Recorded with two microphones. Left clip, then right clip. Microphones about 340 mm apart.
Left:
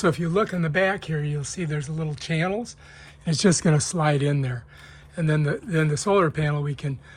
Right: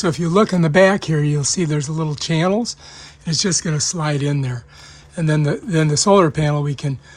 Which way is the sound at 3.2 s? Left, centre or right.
Centre.